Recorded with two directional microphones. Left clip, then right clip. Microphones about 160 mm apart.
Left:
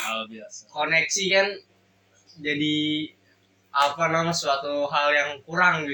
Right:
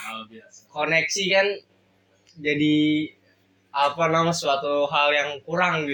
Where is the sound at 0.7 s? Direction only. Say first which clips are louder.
Even; 30° right (ahead or behind).